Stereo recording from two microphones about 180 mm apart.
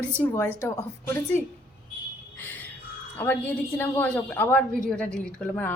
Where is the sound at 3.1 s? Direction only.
10° left (ahead or behind).